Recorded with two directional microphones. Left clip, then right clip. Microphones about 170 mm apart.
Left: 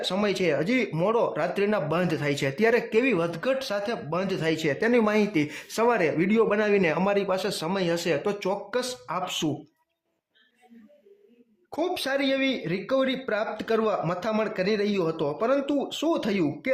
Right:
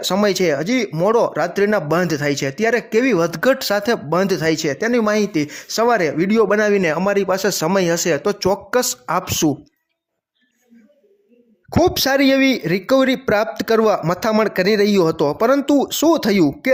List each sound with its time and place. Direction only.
0.0 s speech: 45° right (ahead or behind)
4.6 s speech: 25° right (ahead or behind); by 9.5 s 45° right (ahead or behind)
11.7 s speech: 45° right (ahead or behind)